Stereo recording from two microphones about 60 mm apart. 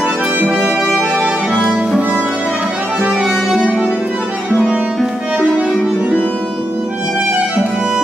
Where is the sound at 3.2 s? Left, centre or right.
Centre.